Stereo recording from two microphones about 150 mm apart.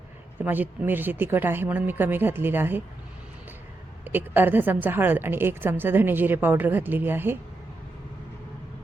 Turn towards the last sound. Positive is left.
turn(degrees=-15)  # may be behind; listen again after turning